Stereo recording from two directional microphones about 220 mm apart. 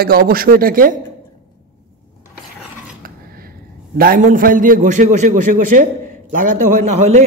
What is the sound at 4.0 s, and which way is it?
A man's voice, 40° right (ahead or behind).